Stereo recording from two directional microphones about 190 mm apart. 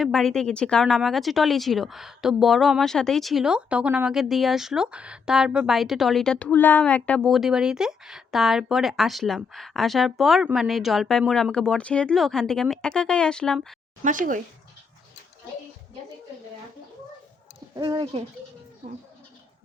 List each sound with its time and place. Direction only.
0.0 s speech: centre (ahead or behind)
14.0 s speech: 45° right (ahead or behind)
17.7 s speech: 20° right (ahead or behind)